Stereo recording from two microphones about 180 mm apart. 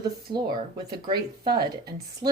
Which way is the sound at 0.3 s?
25° right (ahead or behind).